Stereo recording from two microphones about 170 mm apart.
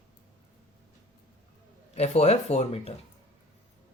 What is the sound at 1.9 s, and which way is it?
Speech, 40° left (ahead or behind).